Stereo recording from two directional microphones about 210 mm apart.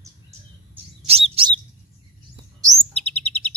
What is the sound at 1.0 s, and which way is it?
Chirp, 30° right (ahead or behind).